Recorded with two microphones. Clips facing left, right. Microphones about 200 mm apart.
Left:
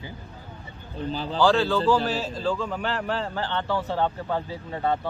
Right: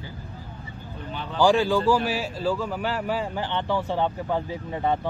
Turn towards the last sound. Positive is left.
turn(degrees=-15)  # may be behind; listen again after turning